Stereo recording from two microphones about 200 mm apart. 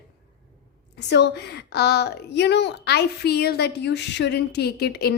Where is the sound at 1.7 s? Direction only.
55° left (ahead or behind).